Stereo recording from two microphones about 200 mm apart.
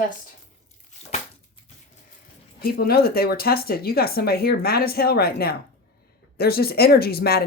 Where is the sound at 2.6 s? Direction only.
50° left (ahead or behind).